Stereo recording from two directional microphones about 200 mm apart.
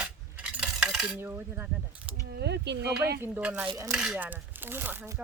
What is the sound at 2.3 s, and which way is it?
Speech, 55° right (ahead or behind).